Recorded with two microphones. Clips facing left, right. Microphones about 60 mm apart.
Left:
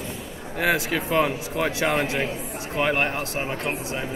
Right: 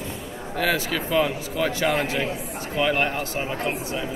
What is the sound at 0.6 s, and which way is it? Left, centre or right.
A man's voice, centre.